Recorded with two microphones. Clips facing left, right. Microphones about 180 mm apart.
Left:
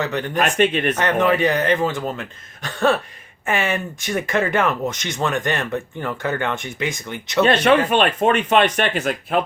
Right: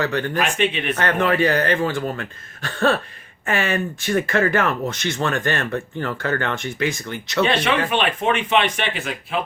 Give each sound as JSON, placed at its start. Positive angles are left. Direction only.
{"t": 0.0, "sound": "speech", "side_deg": 20}
{"t": 0.3, "sound": "speech", "side_deg": 45}
{"t": 1.4, "sound": "speech", "side_deg": 20}
{"t": 7.4, "sound": "speech", "side_deg": 45}